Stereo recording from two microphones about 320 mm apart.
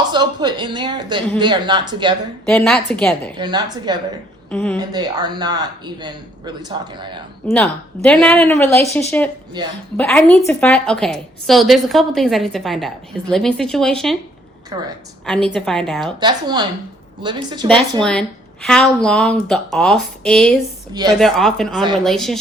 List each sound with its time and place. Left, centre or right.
0.1 s a man's voice: centre
2.5 s a woman's voice: centre
3.3 s a man's voice: centre
4.5 s a woman's voice: centre
4.8 s a man's voice: centre
7.4 s a woman's voice: centre
9.6 s a man's voice: centre
10.0 s a woman's voice: centre
14.7 s a man's voice: centre
15.3 s a woman's voice: centre
16.2 s a man's voice: centre
18.0 s a woman's voice: centre